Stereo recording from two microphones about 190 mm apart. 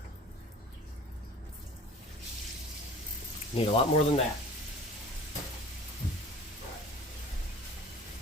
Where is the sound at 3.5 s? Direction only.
35° left (ahead or behind).